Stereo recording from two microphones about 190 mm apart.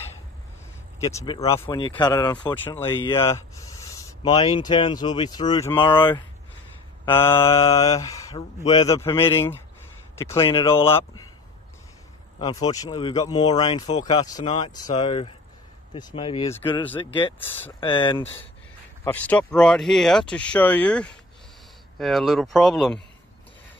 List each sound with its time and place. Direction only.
1.1 s speech: 25° left (ahead or behind)
2.5 s speech: 10° left (ahead or behind)
3.2 s a sound: 15° left (ahead or behind)
4.2 s speech: 30° left (ahead or behind)
7.1 s speech: 15° left (ahead or behind)
12.4 s speech: 20° left (ahead or behind)
17.4 s speech: 10° left (ahead or behind)
17.7 s speech: 25° left (ahead or behind)
19.0 s speech: 10° left (ahead or behind)